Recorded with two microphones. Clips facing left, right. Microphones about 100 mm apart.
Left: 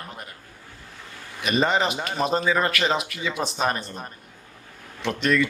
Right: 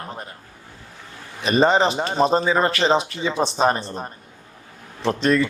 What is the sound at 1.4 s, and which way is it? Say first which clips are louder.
A man's voice: right 5 dB; 35° right (ahead or behind).